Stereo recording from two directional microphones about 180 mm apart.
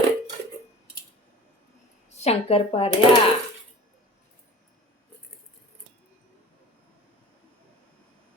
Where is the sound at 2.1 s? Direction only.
35° left (ahead or behind).